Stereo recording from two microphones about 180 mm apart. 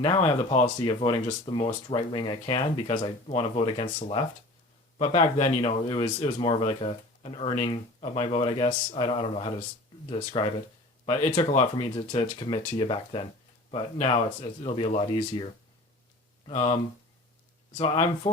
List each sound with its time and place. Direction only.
0.0 s speech: 35° left (ahead or behind)
11.5 s speech: 35° left (ahead or behind)
17.9 s speech: 40° left (ahead or behind)